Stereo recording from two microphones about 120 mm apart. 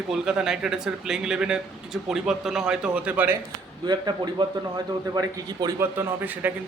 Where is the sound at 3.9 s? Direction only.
35° right (ahead or behind).